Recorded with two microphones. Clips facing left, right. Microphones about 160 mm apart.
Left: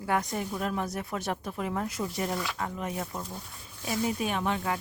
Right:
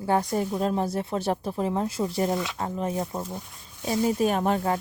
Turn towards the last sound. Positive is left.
turn(degrees=-40)  # may be behind; listen again after turning